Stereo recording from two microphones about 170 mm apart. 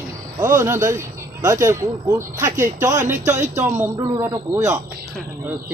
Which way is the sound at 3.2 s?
45° right (ahead or behind).